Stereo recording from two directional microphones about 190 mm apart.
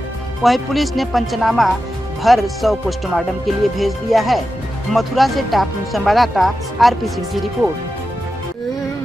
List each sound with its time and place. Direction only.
0.4 s speech: centre (ahead or behind)